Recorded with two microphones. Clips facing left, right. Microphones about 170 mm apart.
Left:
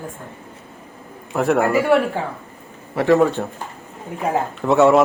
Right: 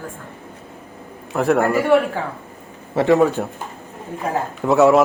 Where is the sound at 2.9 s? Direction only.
20° right (ahead or behind).